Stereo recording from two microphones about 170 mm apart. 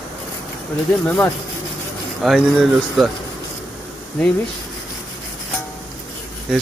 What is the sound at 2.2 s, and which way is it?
Speech, centre (ahead or behind).